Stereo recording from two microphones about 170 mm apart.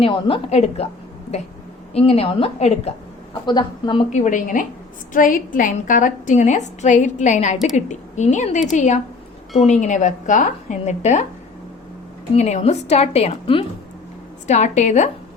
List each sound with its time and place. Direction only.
0.0 s a woman's voice: 35° left (ahead or behind)
1.9 s a woman's voice: 35° left (ahead or behind)
3.4 s a woman's voice: 25° left (ahead or behind)
4.1 s a woman's voice: 45° left (ahead or behind)
12.3 s a woman's voice: 40° left (ahead or behind)